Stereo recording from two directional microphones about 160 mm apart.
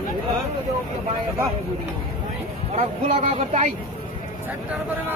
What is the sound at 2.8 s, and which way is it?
Speech, 45° right (ahead or behind).